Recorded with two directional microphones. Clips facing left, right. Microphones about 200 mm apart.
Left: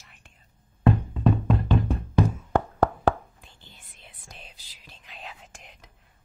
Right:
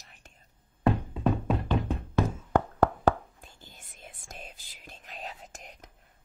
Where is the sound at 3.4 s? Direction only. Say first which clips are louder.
Right 1 dB; 45° right (ahead or behind).